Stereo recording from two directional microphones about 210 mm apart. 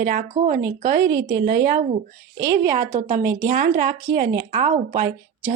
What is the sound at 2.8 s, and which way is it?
Speech, 35° right (ahead or behind).